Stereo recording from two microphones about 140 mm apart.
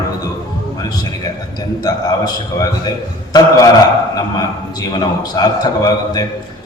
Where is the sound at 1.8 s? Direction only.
25° left (ahead or behind).